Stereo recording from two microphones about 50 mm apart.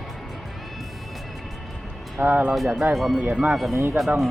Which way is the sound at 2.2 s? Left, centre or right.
Right.